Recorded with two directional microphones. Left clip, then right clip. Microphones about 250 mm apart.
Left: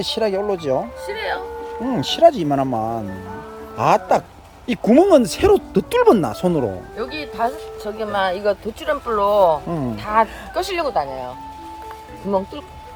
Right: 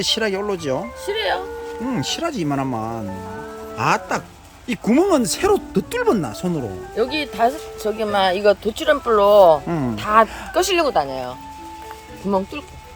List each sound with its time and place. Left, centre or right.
0.0 s speech: centre
1.0 s speech: right
1.9 s speech: centre
6.9 s speech: right